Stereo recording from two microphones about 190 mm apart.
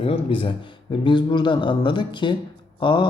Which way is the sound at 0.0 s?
30° left (ahead or behind).